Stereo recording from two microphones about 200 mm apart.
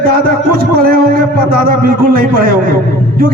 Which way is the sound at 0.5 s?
45° right (ahead or behind).